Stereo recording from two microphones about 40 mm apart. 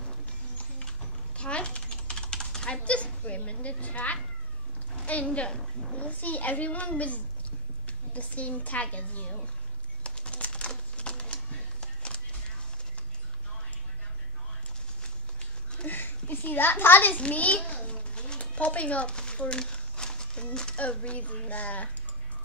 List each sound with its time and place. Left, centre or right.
1.3 s typing: left
2.8 s children playing: left
4.9 s a woman's voice: left
10.0 s typing: left
10.7 s a sound: left
11.8 s music: left
15.9 s a child's voice: left
17.2 s a sound: left; by 20.4 s centre
21.0 s a woman's voice: left